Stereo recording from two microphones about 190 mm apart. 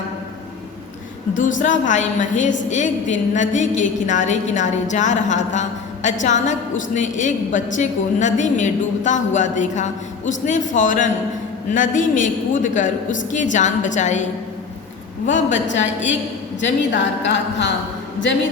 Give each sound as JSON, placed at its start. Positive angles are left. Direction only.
{"t": 1.4, "sound": "a woman's voice", "side_deg": 45}
{"t": 15.3, "sound": "a woman's voice", "side_deg": 40}
{"t": 16.6, "sound": "a woman's voice", "side_deg": 70}